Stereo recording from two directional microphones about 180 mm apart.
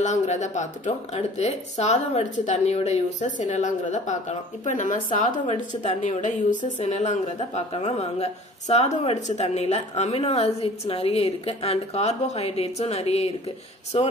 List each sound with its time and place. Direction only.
0.0 s speech: 40° left (ahead or behind)